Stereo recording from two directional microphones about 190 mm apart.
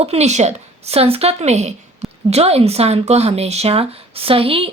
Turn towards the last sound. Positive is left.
turn(degrees=-30)  # may be behind; listen again after turning